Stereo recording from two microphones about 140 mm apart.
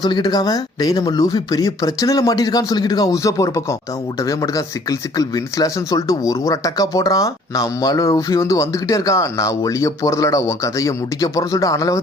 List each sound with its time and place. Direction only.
0.0 s speech: 30° left (ahead or behind)